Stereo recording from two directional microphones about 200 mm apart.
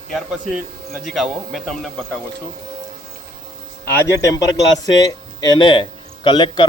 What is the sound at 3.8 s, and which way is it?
A man's voice, 10° left (ahead or behind).